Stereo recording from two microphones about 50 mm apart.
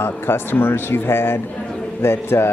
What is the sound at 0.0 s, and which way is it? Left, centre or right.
A man's voice, left.